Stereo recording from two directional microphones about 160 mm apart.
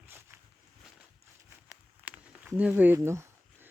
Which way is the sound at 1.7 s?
10° right (ahead or behind).